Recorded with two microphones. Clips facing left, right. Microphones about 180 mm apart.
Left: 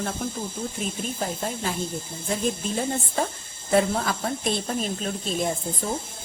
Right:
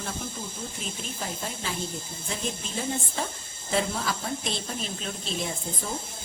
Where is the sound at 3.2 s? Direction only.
50° left (ahead or behind).